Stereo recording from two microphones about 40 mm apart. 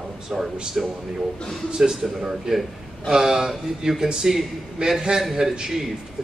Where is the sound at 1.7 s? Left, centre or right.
Centre.